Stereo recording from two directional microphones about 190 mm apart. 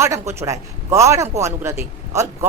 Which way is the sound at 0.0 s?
15° right (ahead or behind).